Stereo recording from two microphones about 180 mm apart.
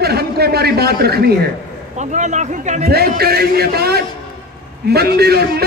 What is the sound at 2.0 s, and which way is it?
Speech, 40° right (ahead or behind).